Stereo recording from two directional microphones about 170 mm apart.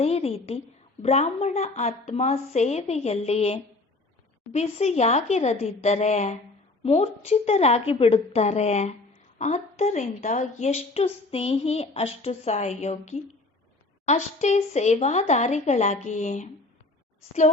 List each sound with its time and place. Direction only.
0.0 s a woman's voice: 35° left (ahead or behind)